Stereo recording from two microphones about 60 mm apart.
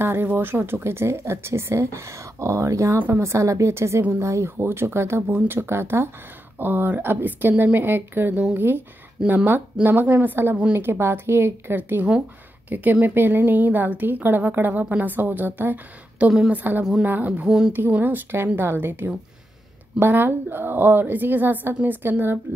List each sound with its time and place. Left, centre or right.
0.0 s speech: right
6.6 s a woman's voice: right
10.8 s a woman's voice: right
17.5 s a woman's voice: centre
17.7 s a woman's voice: right